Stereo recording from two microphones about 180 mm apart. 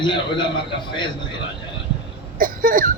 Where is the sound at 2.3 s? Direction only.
50° right (ahead or behind).